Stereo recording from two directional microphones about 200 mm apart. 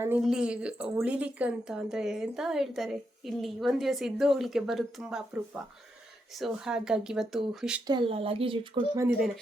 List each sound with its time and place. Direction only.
0.0 s speech: 5° right (ahead or behind)
7.9 s speech: 25° right (ahead or behind)